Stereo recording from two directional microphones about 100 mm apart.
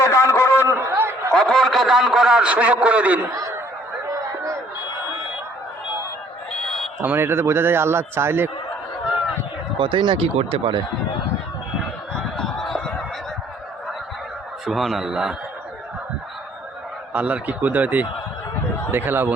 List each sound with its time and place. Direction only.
0.0 s a sound: 30° left (ahead or behind)
0.8 s chatter: 25° right (ahead or behind)
1.3 s a man's voice: 5° left (ahead or behind); by 3.2 s 15° right (ahead or behind)
6.5 s a sound: 5° left (ahead or behind)
7.0 s a man's voice: 20° right (ahead or behind)
9.8 s speech: 55° right (ahead or behind)
10.3 s speech: 70° right (ahead or behind)
12.4 s goose: 5° left (ahead or behind)
14.7 s a man's voice: centre (ahead or behind)
17.1 s a man's voice: 10° right (ahead or behind)